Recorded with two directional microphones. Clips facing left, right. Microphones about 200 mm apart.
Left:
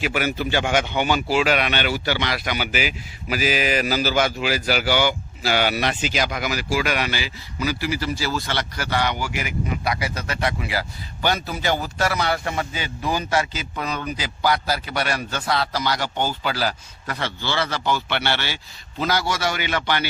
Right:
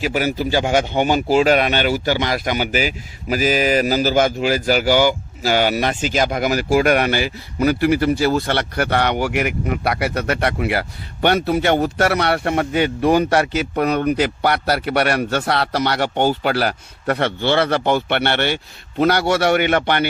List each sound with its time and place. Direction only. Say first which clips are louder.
0.0 s a man's voice: right 4 dB; 40° right (ahead or behind); by 20.1 s 55° right (ahead or behind)